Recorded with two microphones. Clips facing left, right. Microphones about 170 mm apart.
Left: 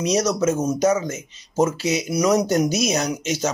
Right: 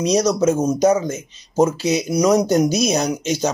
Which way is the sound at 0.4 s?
35° right (ahead or behind).